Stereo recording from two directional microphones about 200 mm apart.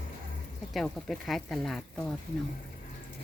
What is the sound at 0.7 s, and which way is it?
Speech, centre (ahead or behind).